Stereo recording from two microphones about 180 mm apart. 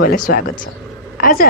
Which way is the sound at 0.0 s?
55° left (ahead or behind).